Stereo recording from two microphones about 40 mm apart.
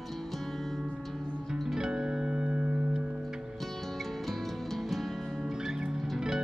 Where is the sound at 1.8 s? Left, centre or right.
Centre.